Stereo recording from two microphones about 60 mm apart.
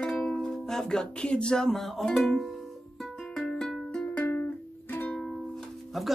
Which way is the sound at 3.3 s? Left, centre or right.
Centre.